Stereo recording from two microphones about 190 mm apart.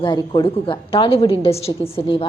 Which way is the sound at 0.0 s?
25° left (ahead or behind).